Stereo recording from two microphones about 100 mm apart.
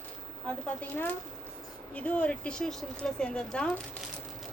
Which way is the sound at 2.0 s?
15° left (ahead or behind).